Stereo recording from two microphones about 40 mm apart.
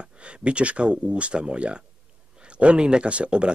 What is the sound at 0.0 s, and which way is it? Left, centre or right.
Speech, right.